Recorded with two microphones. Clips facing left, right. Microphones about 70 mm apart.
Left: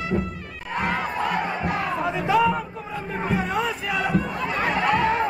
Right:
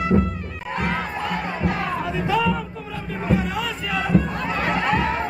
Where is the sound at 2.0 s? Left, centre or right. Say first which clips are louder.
Left 3 dB; left.